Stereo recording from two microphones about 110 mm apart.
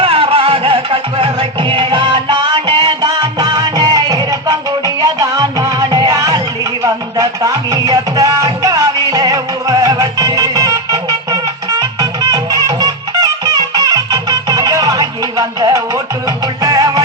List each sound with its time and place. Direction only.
0.0 s music: 55° right (ahead or behind); by 17.0 s 35° right (ahead or behind)